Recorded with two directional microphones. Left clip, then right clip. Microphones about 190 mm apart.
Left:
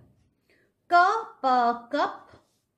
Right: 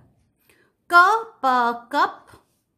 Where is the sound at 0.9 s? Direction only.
45° right (ahead or behind).